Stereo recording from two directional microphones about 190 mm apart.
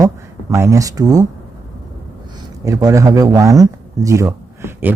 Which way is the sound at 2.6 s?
15° right (ahead or behind).